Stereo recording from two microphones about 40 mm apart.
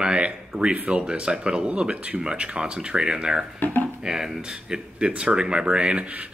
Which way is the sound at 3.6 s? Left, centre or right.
Left.